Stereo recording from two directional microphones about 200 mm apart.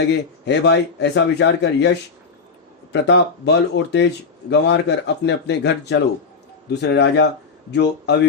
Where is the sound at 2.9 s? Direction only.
60° left (ahead or behind).